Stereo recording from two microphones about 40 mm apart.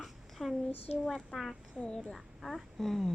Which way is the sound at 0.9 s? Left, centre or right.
Centre.